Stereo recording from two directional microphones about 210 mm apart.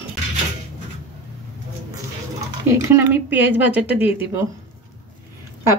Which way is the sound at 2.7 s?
10° right (ahead or behind).